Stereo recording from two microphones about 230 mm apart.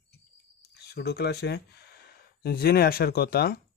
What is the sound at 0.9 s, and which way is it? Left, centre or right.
A man's voice, left.